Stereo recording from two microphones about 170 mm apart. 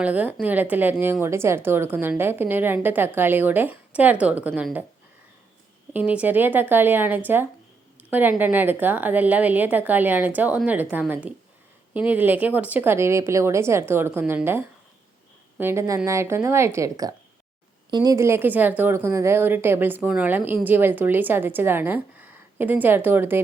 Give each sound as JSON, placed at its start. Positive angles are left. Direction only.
{"t": 0.0, "sound": "a woman's voice", "side_deg": -10}
{"t": 5.9, "sound": "a woman's voice", "side_deg": -10}